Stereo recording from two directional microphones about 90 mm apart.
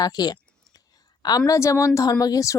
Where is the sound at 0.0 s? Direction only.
50° left (ahead or behind).